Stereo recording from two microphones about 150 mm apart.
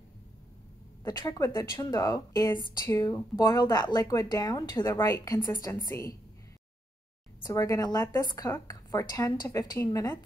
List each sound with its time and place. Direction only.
1.0 s speech: 25° left (ahead or behind)
7.4 s speech: 20° left (ahead or behind)